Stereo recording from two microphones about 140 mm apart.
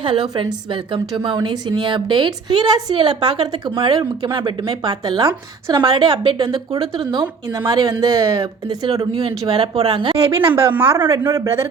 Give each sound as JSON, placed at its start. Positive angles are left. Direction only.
{"t": 0.0, "sound": "a woman's voice", "side_deg": -35}
{"t": 9.6, "sound": "speech", "side_deg": -45}
{"t": 10.5, "sound": "a woman's voice", "side_deg": -15}